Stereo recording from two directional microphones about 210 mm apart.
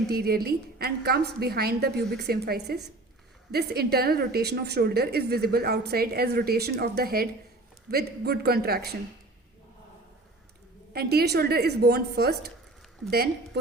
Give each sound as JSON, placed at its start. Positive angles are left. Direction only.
{"t": 0.1, "sound": "a woman's voice", "side_deg": -50}
{"t": 10.9, "sound": "a woman's voice", "side_deg": -50}